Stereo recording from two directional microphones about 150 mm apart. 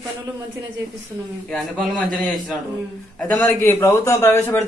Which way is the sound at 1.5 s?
5° left (ahead or behind).